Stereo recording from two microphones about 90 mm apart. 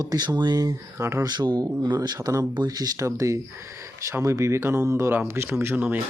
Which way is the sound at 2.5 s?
50° right (ahead or behind).